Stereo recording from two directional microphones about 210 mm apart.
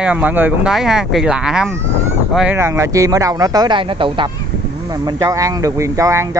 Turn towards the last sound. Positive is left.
turn(degrees=-15)  # may be behind; listen again after turning